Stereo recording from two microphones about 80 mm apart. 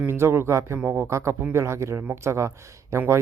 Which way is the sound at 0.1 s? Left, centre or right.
Right.